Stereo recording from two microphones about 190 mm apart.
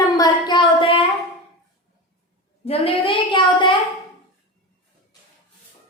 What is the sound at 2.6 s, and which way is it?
A woman's voice, 30° left (ahead or behind).